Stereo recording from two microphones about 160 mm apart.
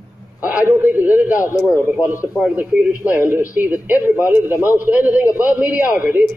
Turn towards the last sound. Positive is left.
turn(degrees=-10)  # may be behind; listen again after turning